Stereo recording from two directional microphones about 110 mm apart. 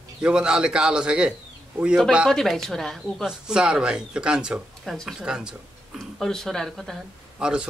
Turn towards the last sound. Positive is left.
turn(degrees=-5)  # may be behind; listen again after turning